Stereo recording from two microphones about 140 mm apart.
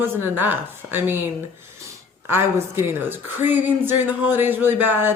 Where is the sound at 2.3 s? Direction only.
15° right (ahead or behind).